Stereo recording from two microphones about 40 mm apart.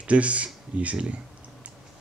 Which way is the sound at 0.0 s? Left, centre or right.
Right.